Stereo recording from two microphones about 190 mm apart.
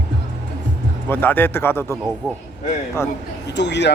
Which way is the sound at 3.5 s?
65° left (ahead or behind).